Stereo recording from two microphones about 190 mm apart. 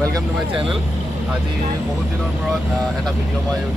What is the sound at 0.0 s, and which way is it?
Speech, 25° right (ahead or behind).